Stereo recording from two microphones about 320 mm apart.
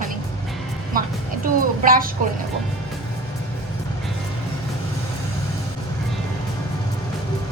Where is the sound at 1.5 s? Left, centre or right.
Right.